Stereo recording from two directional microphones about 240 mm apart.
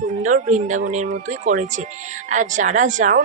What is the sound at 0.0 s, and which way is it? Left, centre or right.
Speech, right.